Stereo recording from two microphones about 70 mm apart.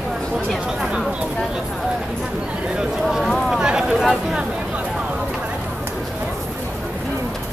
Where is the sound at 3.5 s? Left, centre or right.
Centre.